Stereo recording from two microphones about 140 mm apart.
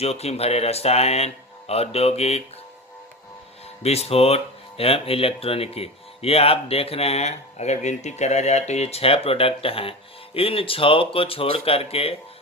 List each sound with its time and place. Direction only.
0.0 s speech: 50° left (ahead or behind)
3.8 s speech: 45° left (ahead or behind)